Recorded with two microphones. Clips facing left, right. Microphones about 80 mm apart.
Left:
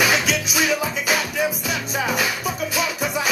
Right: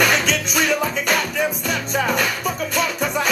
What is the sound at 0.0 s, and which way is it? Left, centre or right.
Music, centre.